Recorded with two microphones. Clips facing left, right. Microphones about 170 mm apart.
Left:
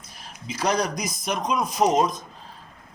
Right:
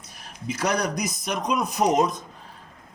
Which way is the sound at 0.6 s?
65° right (ahead or behind).